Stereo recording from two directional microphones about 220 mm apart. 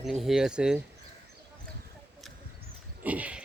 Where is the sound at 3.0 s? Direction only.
5° right (ahead or behind).